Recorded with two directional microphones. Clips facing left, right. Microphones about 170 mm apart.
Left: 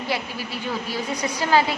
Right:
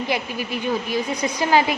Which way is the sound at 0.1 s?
15° right (ahead or behind).